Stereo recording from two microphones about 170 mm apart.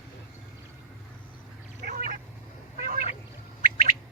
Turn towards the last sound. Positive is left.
turn(degrees=-60)  # may be behind; listen again after turning